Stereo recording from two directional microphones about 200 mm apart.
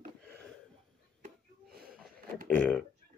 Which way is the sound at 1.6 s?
50° right (ahead or behind).